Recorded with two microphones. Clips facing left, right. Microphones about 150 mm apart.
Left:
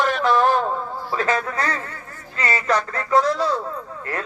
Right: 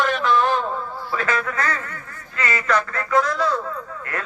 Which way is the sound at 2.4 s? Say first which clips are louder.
Even; 35° left (ahead or behind).